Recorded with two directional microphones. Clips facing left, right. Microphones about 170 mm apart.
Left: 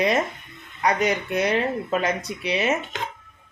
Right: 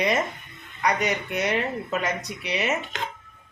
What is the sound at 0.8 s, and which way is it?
Speech, 30° left (ahead or behind).